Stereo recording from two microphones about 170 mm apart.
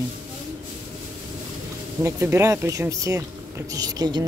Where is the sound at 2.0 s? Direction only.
15° right (ahead or behind).